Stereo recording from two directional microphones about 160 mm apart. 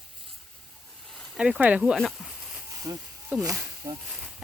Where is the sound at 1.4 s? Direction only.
5° right (ahead or behind).